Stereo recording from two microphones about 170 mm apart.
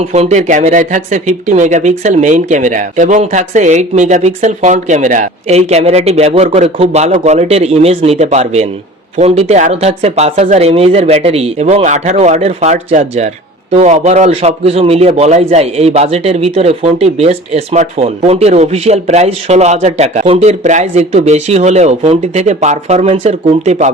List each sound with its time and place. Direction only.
0.0 s speech: 40° right (ahead or behind)